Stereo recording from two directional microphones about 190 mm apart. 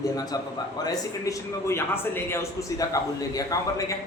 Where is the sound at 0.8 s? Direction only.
20° left (ahead or behind).